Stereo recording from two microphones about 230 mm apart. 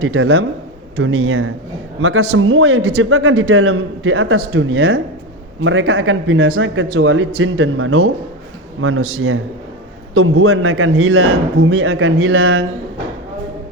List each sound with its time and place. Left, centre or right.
0.0 s a man's voice: right